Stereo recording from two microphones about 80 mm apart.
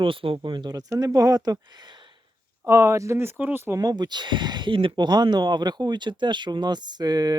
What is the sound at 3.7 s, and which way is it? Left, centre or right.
Speech, right.